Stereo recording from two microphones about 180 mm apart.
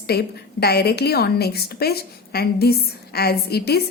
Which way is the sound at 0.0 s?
60° left (ahead or behind).